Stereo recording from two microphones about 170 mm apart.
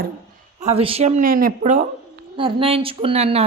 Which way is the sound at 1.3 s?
55° right (ahead or behind).